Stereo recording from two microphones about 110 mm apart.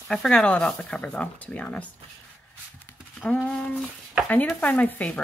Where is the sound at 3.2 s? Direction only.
10° left (ahead or behind).